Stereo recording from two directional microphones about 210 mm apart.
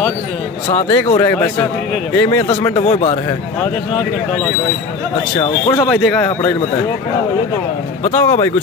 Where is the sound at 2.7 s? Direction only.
30° left (ahead or behind).